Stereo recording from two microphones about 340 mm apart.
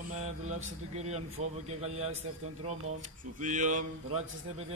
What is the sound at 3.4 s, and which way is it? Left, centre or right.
Mantra, right.